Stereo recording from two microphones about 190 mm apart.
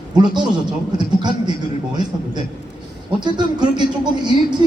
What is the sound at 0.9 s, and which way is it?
Speech, 25° right (ahead or behind).